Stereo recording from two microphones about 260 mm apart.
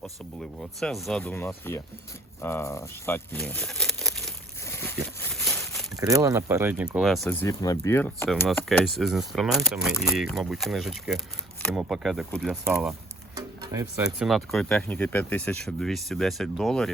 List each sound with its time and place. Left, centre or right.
0.0 s speech: centre
2.4 s a sound: centre
6.0 s speech: centre
7.4 s speech: centre
13.3 s music: centre
14.0 s speech: centre